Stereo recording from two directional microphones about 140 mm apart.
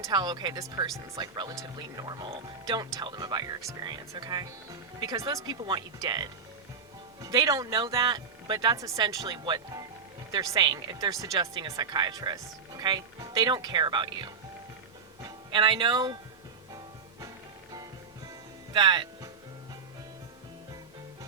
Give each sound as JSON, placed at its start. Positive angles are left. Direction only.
{"t": 0.0, "sound": "speech", "side_deg": -30}
{"t": 16.7, "sound": "music", "side_deg": -25}
{"t": 18.7, "sound": "speech", "side_deg": -30}